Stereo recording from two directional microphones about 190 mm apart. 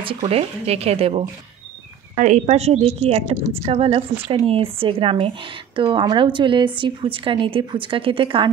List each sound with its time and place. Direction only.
0.0 s a woman's voice: 30° right (ahead or behind)